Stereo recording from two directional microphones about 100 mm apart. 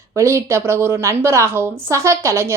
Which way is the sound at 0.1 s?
30° right (ahead or behind).